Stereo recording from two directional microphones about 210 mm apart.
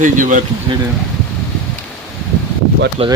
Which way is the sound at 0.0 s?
35° right (ahead or behind).